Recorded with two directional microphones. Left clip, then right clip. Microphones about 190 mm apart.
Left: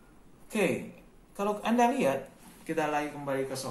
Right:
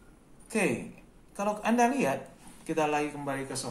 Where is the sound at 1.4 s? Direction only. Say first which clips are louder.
Even; 20° right (ahead or behind).